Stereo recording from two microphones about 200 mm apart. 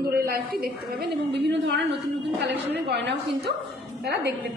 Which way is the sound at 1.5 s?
60° right (ahead or behind).